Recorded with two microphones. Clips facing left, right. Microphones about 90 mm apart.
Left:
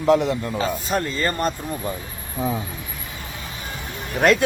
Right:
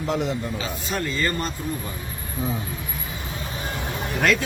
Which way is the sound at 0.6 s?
40° left (ahead or behind).